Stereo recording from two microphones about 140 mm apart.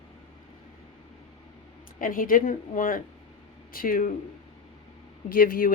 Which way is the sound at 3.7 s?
90° left.